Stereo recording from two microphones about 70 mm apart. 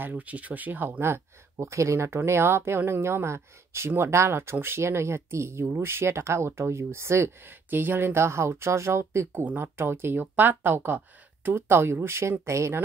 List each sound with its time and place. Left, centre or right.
0.0 s speech: right
9.3 s speech: right